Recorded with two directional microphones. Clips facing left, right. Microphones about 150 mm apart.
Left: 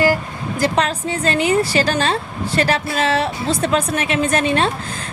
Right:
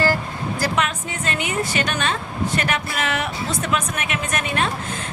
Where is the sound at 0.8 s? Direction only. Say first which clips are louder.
Left 5 dB; 30° left (ahead or behind).